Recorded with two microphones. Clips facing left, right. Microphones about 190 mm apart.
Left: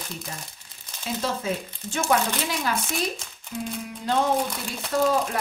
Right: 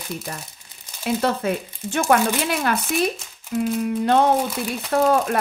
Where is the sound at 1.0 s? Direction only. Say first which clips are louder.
Right 6 dB; 60° right (ahead or behind).